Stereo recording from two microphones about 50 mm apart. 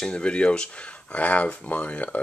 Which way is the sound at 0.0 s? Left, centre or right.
Centre.